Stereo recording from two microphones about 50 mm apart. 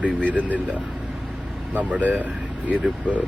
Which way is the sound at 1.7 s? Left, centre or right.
Right.